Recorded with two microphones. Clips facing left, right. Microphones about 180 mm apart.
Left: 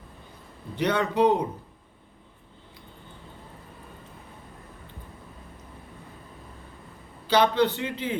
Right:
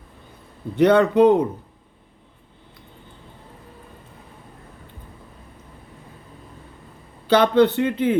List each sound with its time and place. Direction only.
0.8 s speech: 55° right (ahead or behind)
7.3 s speech: 55° right (ahead or behind)